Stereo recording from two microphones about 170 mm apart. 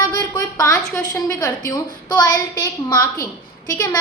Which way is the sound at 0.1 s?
20° left (ahead or behind).